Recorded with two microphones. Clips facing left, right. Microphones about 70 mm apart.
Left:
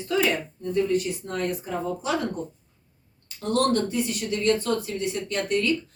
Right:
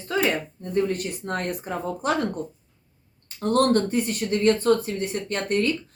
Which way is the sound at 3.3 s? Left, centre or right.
Right.